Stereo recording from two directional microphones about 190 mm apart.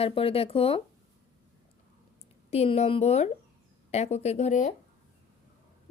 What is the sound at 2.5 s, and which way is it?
Speech, 35° left (ahead or behind).